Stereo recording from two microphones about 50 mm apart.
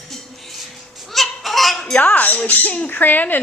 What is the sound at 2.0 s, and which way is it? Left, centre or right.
A woman's voice, left.